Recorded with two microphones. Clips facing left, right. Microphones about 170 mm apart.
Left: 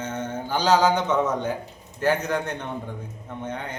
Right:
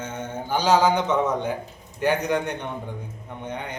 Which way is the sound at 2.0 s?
15° right (ahead or behind).